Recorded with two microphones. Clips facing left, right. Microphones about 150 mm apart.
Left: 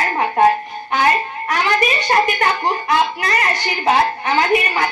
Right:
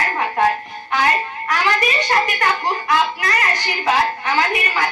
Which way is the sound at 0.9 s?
25° left (ahead or behind).